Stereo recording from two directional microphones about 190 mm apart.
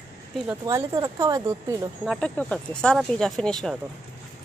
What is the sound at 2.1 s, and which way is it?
Speech, 5° left (ahead or behind).